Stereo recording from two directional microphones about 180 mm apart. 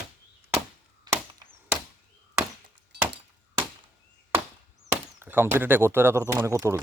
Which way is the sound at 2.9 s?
65° right (ahead or behind).